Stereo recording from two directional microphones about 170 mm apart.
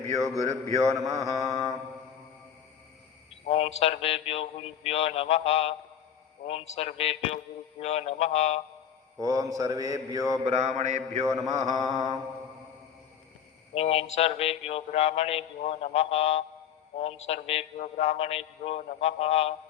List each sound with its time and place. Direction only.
0.3 s mantra: 20° right (ahead or behind)
3.4 s mantra: 40° left (ahead or behind)
9.2 s mantra: 20° right (ahead or behind)
10.4 s mantra: 35° right (ahead or behind)
11.2 s mantra: 20° right (ahead or behind)
13.7 s mantra: 35° left (ahead or behind)